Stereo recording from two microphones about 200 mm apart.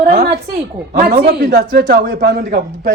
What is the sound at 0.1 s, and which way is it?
A man's voice, 55° right (ahead or behind).